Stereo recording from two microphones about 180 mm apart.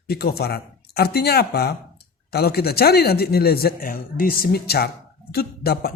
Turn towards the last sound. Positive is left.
turn(degrees=60)  # may be behind; listen again after turning